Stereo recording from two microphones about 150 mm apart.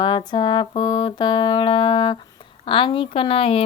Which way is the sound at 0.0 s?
30° left (ahead or behind).